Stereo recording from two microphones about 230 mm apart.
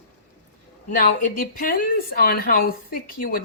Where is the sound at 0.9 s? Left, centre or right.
Left.